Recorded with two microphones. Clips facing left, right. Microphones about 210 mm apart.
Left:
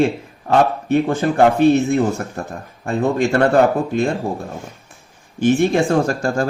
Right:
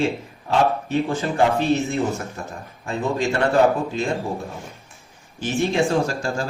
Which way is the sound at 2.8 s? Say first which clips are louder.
Left 6 dB; 55° left (ahead or behind).